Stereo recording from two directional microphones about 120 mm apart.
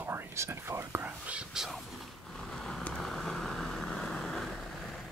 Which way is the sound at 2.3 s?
5° left (ahead or behind).